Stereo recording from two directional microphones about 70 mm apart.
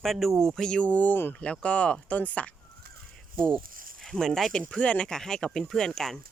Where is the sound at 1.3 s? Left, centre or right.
Centre.